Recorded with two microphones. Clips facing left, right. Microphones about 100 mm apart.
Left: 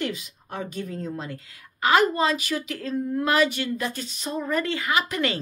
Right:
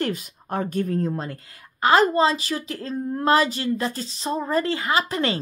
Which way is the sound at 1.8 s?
35° right (ahead or behind).